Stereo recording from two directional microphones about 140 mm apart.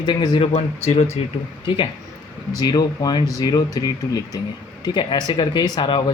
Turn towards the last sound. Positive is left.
turn(degrees=35)  # may be behind; listen again after turning